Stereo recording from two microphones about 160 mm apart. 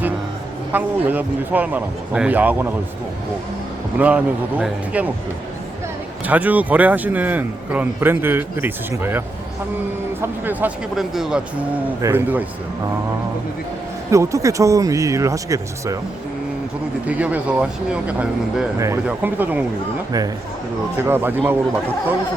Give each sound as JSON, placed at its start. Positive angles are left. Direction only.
{"t": 0.7, "sound": "a man's voice", "side_deg": -10}
{"t": 3.9, "sound": "a man's voice", "side_deg": -10}
{"t": 6.2, "sound": "a man's voice", "side_deg": -10}
{"t": 14.1, "sound": "speech", "side_deg": -20}
{"t": 17.1, "sound": "a man's voice", "side_deg": -10}
{"t": 21.0, "sound": "a man's voice", "side_deg": -15}